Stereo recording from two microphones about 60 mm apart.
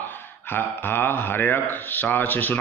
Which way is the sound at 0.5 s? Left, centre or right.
Left.